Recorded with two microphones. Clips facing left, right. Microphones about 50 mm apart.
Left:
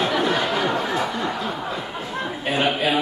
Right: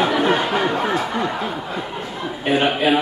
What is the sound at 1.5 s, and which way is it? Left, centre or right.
A man's voice, centre.